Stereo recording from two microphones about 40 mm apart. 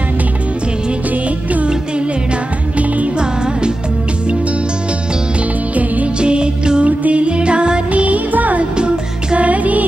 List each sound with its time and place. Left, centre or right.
6.1 s music: right
6.9 s music: right
7.9 s music: right
8.7 s music: right
9.5 s music: right